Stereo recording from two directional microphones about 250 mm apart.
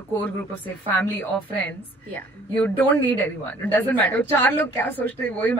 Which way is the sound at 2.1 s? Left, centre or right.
Centre.